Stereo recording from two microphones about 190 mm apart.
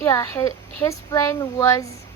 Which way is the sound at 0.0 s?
15° left (ahead or behind).